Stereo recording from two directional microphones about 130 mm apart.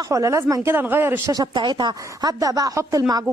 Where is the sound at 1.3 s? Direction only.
35° right (ahead or behind).